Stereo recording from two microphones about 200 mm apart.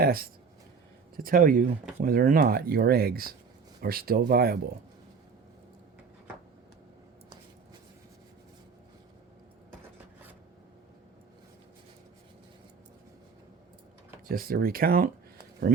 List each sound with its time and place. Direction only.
0.0 s speech: 50° right (ahead or behind)
14.3 s speech: 45° right (ahead or behind)